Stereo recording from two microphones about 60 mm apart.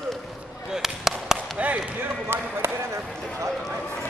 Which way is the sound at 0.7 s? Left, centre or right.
Centre.